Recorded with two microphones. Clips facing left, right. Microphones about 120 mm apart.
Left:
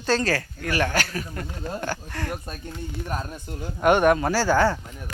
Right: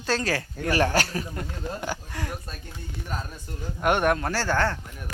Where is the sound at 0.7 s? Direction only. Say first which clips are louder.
Right 2 dB; 35° right (ahead or behind).